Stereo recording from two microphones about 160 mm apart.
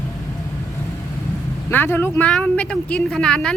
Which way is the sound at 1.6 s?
15° left (ahead or behind).